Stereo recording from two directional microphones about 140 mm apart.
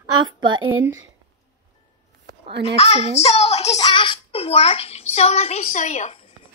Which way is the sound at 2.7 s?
50° left (ahead or behind).